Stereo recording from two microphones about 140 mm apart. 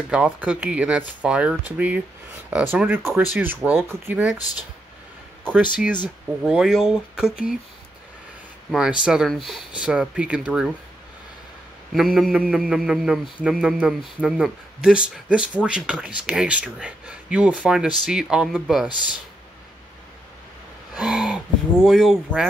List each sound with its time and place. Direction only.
0.1 s speech: 10° right (ahead or behind)
4.4 s speech: 25° left (ahead or behind)
6.4 s a man's voice: 5° right (ahead or behind)
8.7 s a man's voice: 5° right (ahead or behind)
11.9 s a man's voice: centre (ahead or behind)
20.9 s speech: 5° right (ahead or behind)